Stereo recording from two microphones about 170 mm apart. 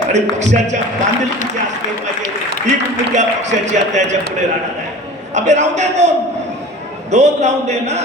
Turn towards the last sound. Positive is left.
turn(degrees=-40)  # may be behind; listen again after turning